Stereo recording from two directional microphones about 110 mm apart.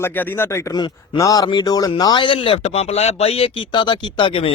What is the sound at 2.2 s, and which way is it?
Speech, 55° left (ahead or behind).